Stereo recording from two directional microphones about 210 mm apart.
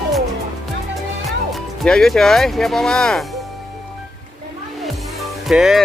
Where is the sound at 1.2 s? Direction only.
Centre (ahead or behind).